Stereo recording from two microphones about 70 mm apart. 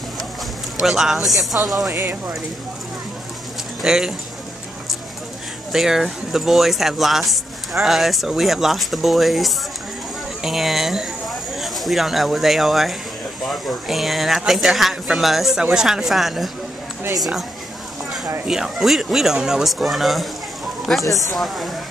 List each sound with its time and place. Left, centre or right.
0.8 s speech: centre
1.9 s speech: right
3.8 s speech: centre
5.7 s speech: centre